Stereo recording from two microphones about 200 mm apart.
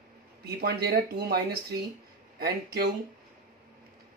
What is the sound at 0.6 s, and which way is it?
Speech, 50° right (ahead or behind).